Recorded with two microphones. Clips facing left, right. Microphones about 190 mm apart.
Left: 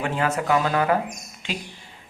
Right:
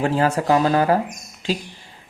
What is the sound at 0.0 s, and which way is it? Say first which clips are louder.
Speech: right 5 dB; 35° right (ahead or behind).